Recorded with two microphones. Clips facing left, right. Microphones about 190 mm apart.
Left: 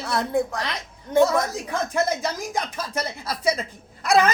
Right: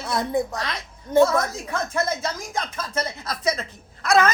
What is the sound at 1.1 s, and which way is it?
Speech, 15° left (ahead or behind).